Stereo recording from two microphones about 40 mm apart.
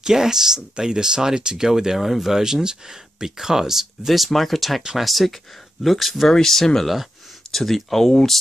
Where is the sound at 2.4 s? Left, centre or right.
Centre.